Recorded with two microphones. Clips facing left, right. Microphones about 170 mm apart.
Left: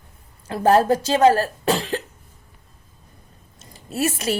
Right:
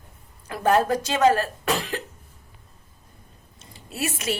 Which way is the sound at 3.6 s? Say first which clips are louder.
Left 6 dB; 40° left (ahead or behind).